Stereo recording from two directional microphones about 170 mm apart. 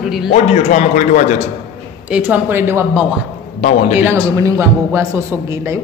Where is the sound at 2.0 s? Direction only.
10° right (ahead or behind).